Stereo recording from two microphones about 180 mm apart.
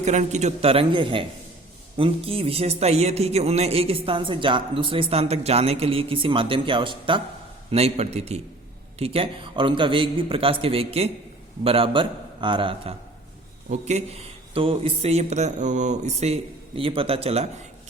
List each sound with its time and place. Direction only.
0.0 s a man's voice: 40° right (ahead or behind)